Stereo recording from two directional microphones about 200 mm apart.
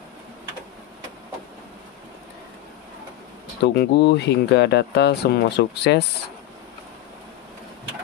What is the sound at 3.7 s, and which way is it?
Speech, 55° left (ahead or behind).